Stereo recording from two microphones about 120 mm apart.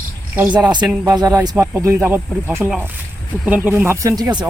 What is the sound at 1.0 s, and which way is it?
Speech, 30° right (ahead or behind).